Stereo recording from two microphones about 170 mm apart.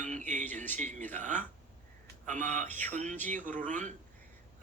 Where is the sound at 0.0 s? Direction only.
45° right (ahead or behind).